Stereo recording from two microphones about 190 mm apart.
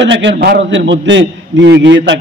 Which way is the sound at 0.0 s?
70° right (ahead or behind).